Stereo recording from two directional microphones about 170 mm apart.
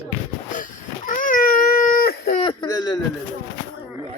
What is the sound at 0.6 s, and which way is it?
Baby cry, 50° left (ahead or behind).